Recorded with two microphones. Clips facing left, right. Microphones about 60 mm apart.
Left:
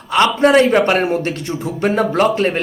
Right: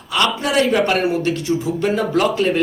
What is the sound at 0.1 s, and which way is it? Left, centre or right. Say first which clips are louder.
Speech: left 7 dB; left.